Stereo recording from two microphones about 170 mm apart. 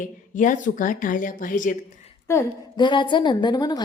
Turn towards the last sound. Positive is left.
turn(degrees=25)  # may be behind; listen again after turning